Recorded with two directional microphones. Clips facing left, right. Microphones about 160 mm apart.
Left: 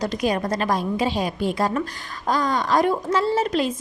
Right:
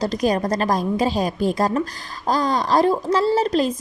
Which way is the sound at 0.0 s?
40° right (ahead or behind).